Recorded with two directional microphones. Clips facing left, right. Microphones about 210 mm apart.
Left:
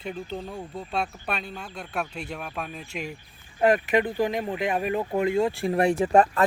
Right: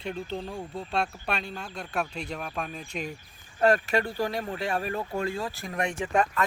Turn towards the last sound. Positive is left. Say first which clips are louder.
# left 6 dB
turn(degrees=35)  # may be behind; listen again after turning